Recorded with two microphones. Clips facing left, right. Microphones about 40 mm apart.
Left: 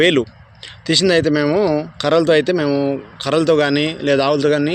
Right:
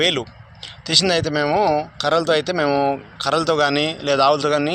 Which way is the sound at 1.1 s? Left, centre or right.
Centre.